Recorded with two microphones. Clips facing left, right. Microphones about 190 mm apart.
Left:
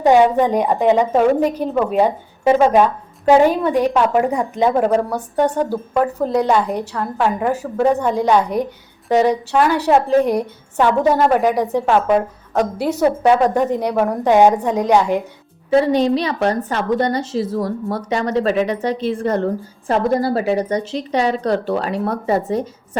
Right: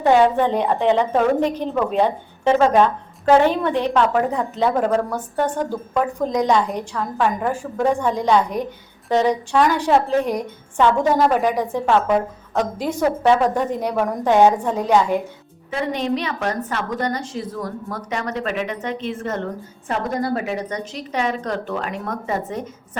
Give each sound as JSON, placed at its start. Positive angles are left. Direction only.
{"t": 0.0, "sound": "a woman's voice", "side_deg": 15}
{"t": 15.7, "sound": "a woman's voice", "side_deg": 35}